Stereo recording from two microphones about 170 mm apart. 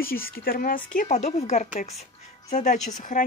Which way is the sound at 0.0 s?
60° left (ahead or behind).